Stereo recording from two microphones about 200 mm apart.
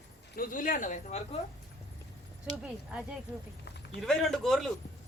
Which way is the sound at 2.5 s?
5° right (ahead or behind).